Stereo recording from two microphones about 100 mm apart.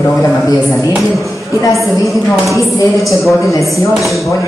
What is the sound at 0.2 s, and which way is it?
Speech, 35° left (ahead or behind).